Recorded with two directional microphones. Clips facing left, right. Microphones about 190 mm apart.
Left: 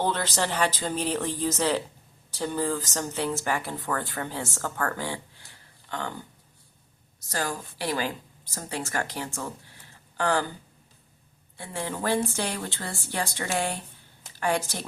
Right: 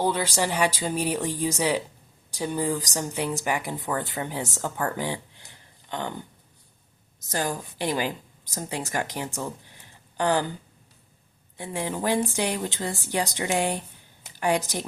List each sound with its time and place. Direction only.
0.0 s speech: 10° right (ahead or behind)
7.3 s a woman's voice: 20° right (ahead or behind)
11.5 s speech: 15° right (ahead or behind)
14.3 s a sound: 15° right (ahead or behind)